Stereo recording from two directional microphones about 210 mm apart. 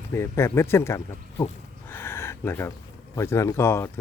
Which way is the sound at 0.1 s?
10° left (ahead or behind).